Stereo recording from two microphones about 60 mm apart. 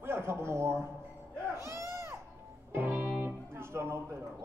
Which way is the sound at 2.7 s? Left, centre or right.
Right.